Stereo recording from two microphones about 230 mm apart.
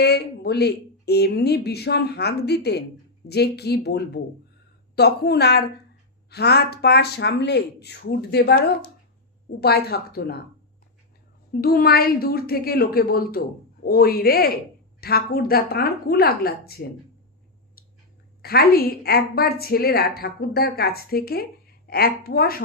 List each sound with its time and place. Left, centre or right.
0.0 s speech: left
11.6 s a woman's voice: left
17.8 s a sound: left
18.4 s a woman's voice: left